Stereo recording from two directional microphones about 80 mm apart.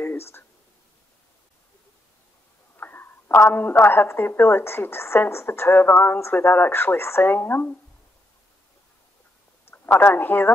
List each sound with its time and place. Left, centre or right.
0.0 s a sound: left
2.8 s a woman's voice: left
9.7 s speech: left